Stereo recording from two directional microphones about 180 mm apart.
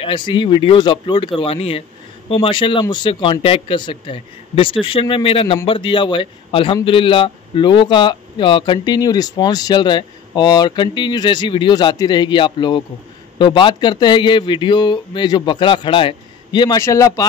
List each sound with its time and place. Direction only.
0.0 s a man's voice: 25° left (ahead or behind)